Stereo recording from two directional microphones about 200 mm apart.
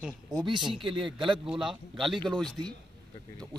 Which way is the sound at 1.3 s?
Centre (ahead or behind).